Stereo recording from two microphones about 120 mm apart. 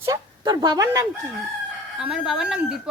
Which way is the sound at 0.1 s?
35° right (ahead or behind).